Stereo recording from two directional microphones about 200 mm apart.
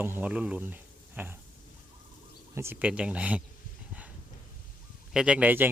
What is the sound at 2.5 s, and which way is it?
Speech, 10° right (ahead or behind).